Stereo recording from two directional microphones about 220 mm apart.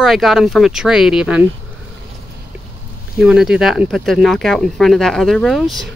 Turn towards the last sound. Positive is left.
turn(degrees=0)  # may be behind; listen again after turning